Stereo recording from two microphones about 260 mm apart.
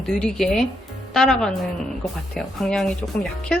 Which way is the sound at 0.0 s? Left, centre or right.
Centre.